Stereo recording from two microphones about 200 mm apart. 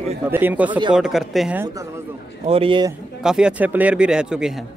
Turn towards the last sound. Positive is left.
turn(degrees=-5)  # may be behind; listen again after turning